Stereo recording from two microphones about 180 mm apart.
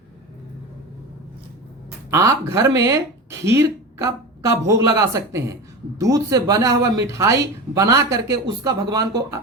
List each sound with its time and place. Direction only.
2.0 s speech: 15° right (ahead or behind)